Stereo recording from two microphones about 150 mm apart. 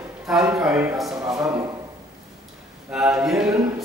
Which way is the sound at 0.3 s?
5° right (ahead or behind).